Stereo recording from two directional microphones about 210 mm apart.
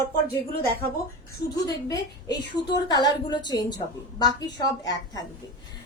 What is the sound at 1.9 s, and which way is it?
A woman's voice, 15° left (ahead or behind).